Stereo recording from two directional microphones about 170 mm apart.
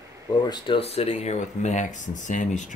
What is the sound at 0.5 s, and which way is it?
Speech, 30° left (ahead or behind).